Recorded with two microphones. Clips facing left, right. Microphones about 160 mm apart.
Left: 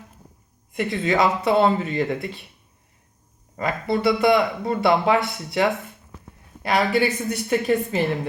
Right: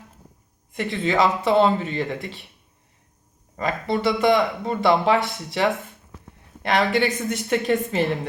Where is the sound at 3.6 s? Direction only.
20° right (ahead or behind).